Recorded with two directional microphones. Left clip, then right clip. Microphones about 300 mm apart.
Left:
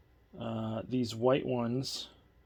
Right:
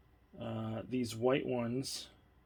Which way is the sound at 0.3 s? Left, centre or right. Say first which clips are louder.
Left 4 dB; left.